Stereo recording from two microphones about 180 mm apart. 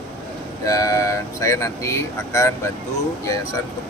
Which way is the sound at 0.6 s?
20° left (ahead or behind).